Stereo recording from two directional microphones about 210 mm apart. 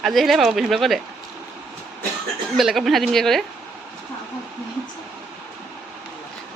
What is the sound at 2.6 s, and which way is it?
Speech, centre (ahead or behind).